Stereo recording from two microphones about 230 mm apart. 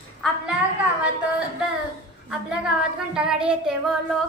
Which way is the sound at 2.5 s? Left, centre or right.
Centre.